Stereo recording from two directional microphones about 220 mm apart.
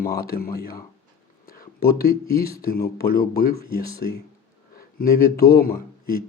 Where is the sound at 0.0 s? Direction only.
45° left (ahead or behind).